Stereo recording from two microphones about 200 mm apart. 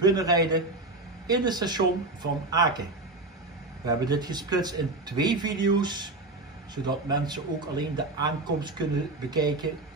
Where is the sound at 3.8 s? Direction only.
20° right (ahead or behind).